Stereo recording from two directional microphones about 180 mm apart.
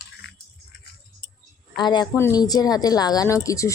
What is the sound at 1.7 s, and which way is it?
A woman's voice, 25° left (ahead or behind).